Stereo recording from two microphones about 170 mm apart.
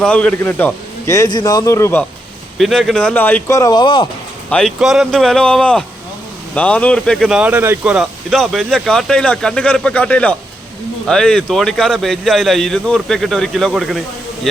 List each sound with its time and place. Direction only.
0.0 s speech: 5° left (ahead or behind)
2.6 s speech: centre (ahead or behind); by 4.1 s 25° left (ahead or behind)
4.4 s speech: 5° left (ahead or behind)